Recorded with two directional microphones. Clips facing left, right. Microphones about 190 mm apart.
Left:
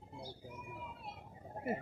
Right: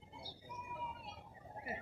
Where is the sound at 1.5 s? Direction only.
50° left (ahead or behind).